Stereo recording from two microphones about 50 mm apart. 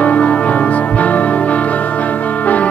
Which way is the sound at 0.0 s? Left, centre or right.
Left.